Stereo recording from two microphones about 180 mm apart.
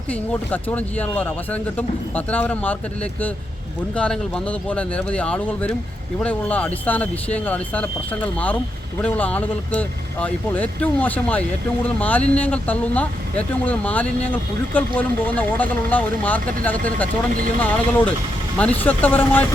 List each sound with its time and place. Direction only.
0.1 s speech: 10° left (ahead or behind)